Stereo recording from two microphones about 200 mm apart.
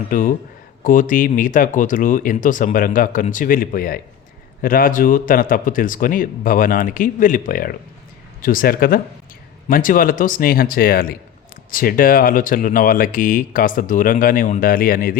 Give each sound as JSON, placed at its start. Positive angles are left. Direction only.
{"t": 0.1, "sound": "speech", "side_deg": 45}